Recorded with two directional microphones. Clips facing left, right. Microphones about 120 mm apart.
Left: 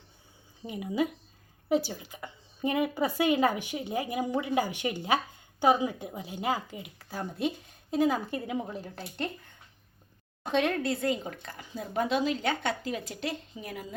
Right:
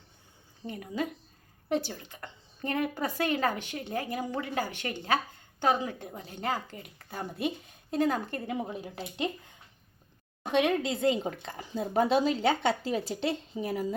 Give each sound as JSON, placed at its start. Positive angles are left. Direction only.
{"t": 0.7, "sound": "a woman's voice", "side_deg": 10}
{"t": 8.7, "sound": "a woman's voice", "side_deg": -10}
{"t": 10.4, "sound": "a woman's voice", "side_deg": -5}
{"t": 10.8, "sound": "speech", "side_deg": -20}